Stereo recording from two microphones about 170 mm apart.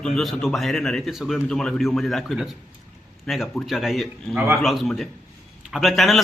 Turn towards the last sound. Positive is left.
turn(degrees=0)  # may be behind; listen again after turning